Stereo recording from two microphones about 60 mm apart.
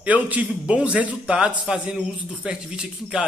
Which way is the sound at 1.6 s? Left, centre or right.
Centre.